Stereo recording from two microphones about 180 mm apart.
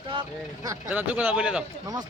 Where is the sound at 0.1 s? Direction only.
25° right (ahead or behind).